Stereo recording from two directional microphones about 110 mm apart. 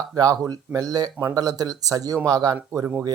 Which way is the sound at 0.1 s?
35° right (ahead or behind).